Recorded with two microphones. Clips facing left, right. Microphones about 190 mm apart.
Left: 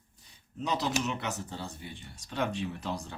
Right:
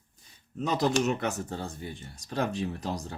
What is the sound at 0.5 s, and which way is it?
Speech, 50° right (ahead or behind).